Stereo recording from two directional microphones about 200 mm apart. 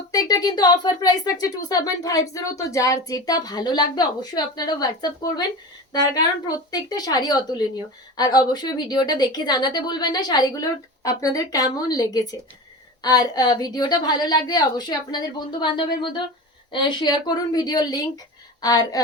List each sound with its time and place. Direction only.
0.1 s speech: 20° left (ahead or behind)